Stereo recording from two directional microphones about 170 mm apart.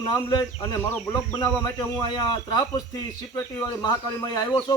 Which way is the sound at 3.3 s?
25° left (ahead or behind).